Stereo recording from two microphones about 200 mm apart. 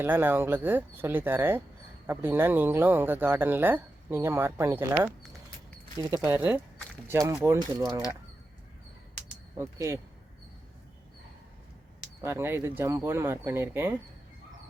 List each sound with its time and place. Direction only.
0.0 s speech: 10° right (ahead or behind)
9.6 s speech: 15° right (ahead or behind)
12.2 s speech: 10° right (ahead or behind)